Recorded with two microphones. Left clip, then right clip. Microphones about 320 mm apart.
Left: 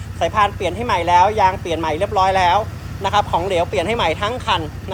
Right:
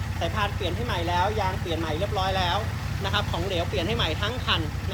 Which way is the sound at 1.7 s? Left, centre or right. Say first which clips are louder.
Left 10 dB; left.